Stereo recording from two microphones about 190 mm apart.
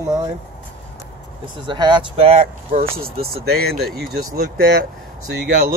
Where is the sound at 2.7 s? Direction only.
50° right (ahead or behind).